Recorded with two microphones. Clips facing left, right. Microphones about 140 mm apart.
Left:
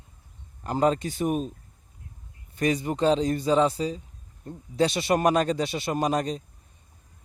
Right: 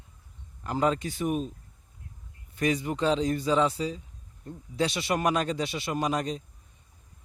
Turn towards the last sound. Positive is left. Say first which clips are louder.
# left 3 dB
turn(degrees=40)  # may be behind; listen again after turning